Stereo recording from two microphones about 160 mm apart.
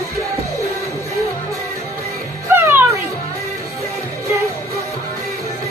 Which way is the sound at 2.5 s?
15° right (ahead or behind).